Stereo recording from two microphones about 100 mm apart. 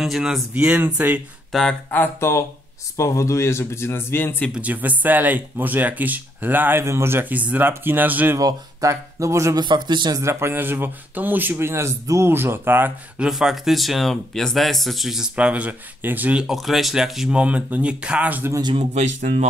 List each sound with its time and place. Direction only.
0.0 s speech: 5° right (ahead or behind)
1.5 s speech: 5° left (ahead or behind)
1.9 s speech: 25° left (ahead or behind)
4.6 s speech: 15° right (ahead or behind)
8.4 s speech: 35° right (ahead or behind)
9.6 s a man's voice: 50° right (ahead or behind)
10.1 s speech: 25° right (ahead or behind)
13.2 s speech: 5° right (ahead or behind)
16.4 s speech: centre (ahead or behind)
18.8 s speech: 90° right